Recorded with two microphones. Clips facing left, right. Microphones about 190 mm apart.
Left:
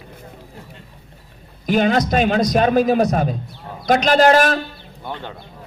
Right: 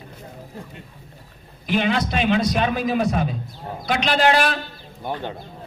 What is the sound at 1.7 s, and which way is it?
A man's voice, 45° left (ahead or behind).